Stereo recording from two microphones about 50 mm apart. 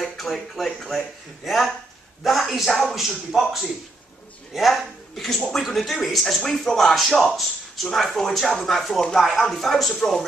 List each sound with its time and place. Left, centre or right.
0.0 s speech: centre
4.6 s speech: centre